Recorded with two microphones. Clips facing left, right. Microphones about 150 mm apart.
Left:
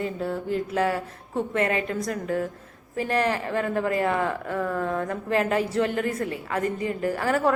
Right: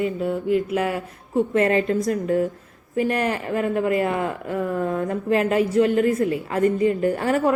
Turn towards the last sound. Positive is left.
turn(degrees=-25)  # may be behind; listen again after turning